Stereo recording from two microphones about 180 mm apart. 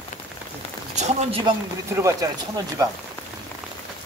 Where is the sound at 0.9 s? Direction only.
40° right (ahead or behind).